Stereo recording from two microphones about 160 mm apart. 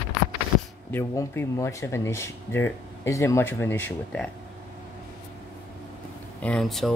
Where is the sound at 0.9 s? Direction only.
15° left (ahead or behind).